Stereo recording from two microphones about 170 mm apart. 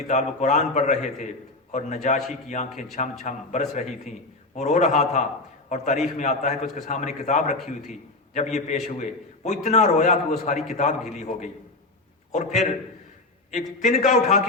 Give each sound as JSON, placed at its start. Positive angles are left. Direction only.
{"t": 0.1, "sound": "a man's voice", "side_deg": 45}